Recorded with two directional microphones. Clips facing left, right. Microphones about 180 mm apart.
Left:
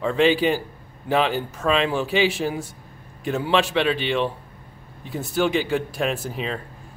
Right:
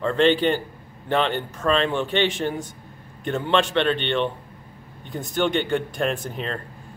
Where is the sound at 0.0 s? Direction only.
5° left (ahead or behind).